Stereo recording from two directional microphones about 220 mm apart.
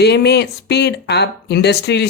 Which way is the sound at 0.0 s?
50° left (ahead or behind).